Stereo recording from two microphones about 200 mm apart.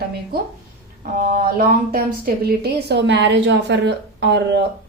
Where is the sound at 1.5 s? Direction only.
45° right (ahead or behind).